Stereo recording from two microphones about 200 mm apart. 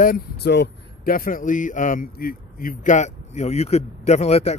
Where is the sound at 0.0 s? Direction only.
50° left (ahead or behind).